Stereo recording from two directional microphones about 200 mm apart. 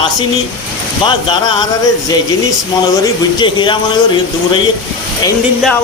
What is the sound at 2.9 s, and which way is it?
Speech, 20° left (ahead or behind).